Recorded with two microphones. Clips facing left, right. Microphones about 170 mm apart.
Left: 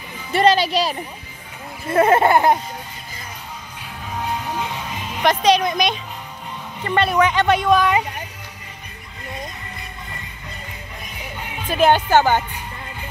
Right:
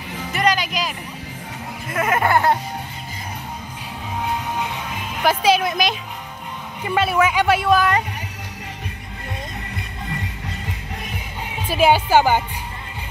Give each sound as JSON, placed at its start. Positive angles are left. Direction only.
{"t": 0.3, "sound": "music", "side_deg": 30}
{"t": 1.9, "sound": "speech", "side_deg": 30}
{"t": 5.1, "sound": "speech", "side_deg": -5}
{"t": 11.6, "sound": "speech", "side_deg": -10}